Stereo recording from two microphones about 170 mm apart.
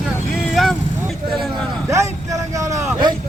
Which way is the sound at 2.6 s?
20° right (ahead or behind).